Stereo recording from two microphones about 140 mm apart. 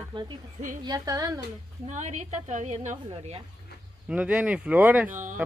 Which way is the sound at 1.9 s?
60° right (ahead or behind).